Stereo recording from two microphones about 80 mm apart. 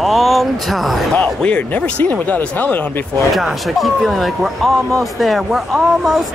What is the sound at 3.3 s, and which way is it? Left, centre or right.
Speech, centre.